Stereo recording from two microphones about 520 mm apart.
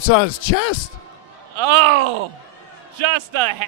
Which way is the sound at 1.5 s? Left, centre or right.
Right.